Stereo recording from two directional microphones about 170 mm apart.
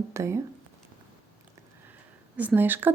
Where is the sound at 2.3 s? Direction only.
10° right (ahead or behind).